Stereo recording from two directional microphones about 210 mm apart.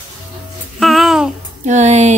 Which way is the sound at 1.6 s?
35° right (ahead or behind).